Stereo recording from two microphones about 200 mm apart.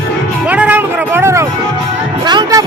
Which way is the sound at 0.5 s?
5° right (ahead or behind).